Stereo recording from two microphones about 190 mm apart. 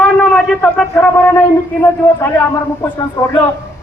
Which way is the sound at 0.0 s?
5° left (ahead or behind).